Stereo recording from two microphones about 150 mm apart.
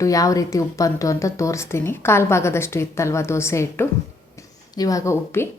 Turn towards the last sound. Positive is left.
turn(degrees=15)  # may be behind; listen again after turning